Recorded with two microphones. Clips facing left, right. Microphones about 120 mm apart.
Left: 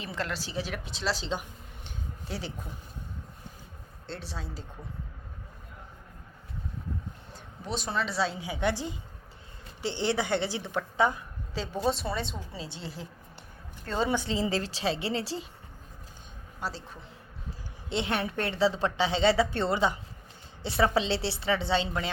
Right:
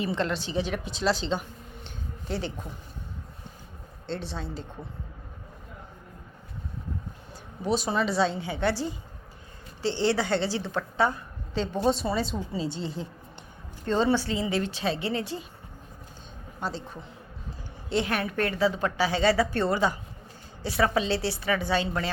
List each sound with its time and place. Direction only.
0.0 s a woman's voice: centre (ahead or behind)
4.0 s a woman's voice: 5° left (ahead or behind)
7.6 s a woman's voice: 5° right (ahead or behind)
14.3 s a woman's voice: 30° left (ahead or behind)
16.6 s a woman's voice: 5° left (ahead or behind)
17.8 s a woman's voice: 25° left (ahead or behind)